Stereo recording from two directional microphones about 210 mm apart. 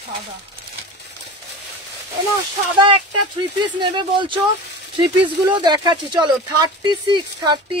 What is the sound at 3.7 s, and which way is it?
Speech, 20° right (ahead or behind).